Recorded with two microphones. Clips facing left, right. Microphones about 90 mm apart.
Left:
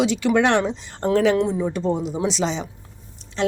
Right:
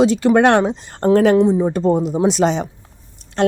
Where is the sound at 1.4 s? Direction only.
35° right (ahead or behind).